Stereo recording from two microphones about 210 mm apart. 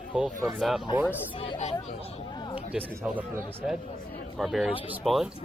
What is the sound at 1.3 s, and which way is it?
Speech, 25° left (ahead or behind).